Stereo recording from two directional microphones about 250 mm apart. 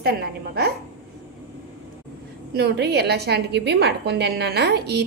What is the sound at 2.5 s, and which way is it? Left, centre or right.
A woman's voice, right.